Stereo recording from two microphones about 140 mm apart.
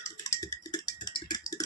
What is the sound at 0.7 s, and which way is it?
Rattle, 30° left (ahead or behind).